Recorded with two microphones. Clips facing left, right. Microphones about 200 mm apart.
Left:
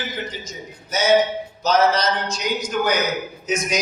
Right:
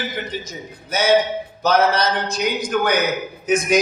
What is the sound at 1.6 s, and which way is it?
A man's voice, 55° right (ahead or behind).